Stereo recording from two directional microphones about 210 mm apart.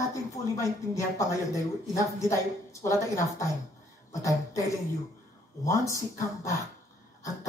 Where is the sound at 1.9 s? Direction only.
15° left (ahead or behind).